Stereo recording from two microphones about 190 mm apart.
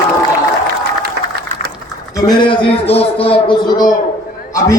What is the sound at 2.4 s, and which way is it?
A man's voice, 30° left (ahead or behind).